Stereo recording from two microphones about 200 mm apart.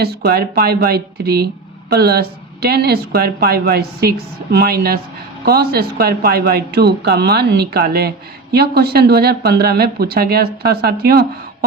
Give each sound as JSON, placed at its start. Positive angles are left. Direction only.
{"t": 0.0, "sound": "speech", "side_deg": -50}